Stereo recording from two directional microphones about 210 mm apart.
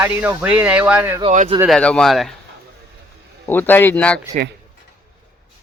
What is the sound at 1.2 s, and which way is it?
Speech, 30° right (ahead or behind).